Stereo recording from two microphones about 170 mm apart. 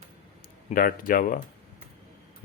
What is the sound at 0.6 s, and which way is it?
Speech, 55° left (ahead or behind).